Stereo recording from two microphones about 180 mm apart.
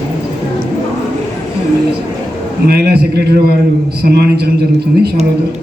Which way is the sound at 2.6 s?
60° right (ahead or behind).